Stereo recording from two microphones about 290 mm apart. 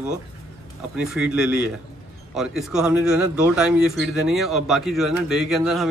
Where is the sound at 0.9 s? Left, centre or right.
Centre.